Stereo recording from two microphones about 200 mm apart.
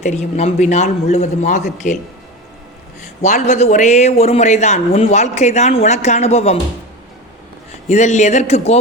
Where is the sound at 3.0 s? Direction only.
35° left (ahead or behind).